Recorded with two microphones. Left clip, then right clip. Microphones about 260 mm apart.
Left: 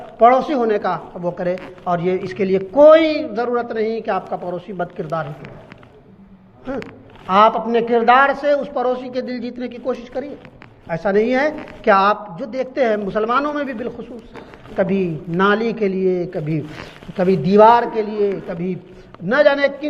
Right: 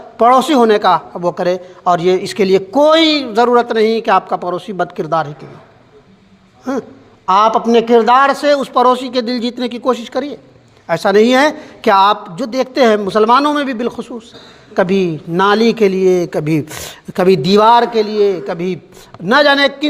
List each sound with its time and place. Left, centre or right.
0.2 s a man's voice: right
7.3 s a man's voice: right